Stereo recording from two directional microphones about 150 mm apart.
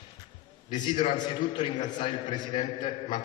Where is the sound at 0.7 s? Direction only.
30° left (ahead or behind).